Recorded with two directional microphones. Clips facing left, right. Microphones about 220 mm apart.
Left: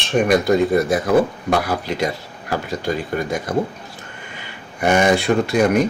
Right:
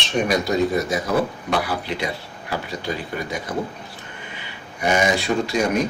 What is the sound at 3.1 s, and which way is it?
Speech, 45° left (ahead or behind).